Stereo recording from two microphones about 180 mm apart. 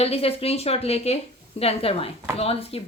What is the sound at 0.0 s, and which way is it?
A woman's voice, 35° left (ahead or behind).